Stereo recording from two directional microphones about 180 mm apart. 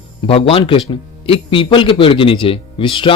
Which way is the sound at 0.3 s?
30° left (ahead or behind).